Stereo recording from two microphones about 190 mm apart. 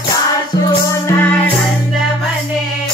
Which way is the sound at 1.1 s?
10° left (ahead or behind).